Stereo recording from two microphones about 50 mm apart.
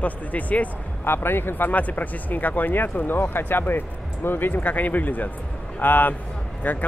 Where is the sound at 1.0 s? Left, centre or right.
Left.